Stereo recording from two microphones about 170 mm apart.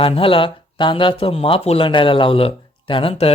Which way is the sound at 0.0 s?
35° left (ahead or behind).